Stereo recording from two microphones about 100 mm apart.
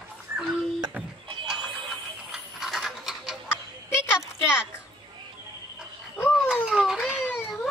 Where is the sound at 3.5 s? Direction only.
25° left (ahead or behind).